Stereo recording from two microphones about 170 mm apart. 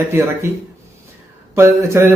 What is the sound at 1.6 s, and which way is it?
Speech, 15° right (ahead or behind).